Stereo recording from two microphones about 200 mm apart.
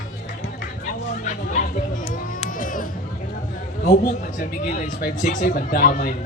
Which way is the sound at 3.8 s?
40° left (ahead or behind).